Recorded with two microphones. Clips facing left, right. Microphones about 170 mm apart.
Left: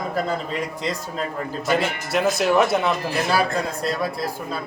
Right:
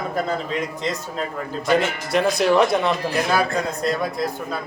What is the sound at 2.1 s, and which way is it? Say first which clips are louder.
Speech: right 1 dB; centre (ahead or behind).